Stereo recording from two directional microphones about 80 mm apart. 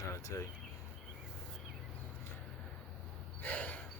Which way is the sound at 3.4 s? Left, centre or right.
Centre.